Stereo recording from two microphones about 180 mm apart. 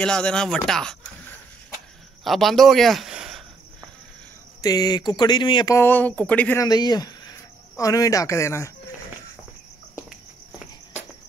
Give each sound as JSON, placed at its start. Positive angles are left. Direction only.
{"t": 0.0, "sound": "speech", "side_deg": 5}
{"t": 2.2, "sound": "a man's voice", "side_deg": 0}
{"t": 4.6, "sound": "speech", "side_deg": 20}
{"t": 5.8, "sound": "speech", "side_deg": 10}
{"t": 6.6, "sound": "speech", "side_deg": 20}